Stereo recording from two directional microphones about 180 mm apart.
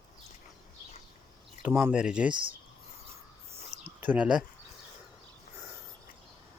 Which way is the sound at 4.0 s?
10° right (ahead or behind).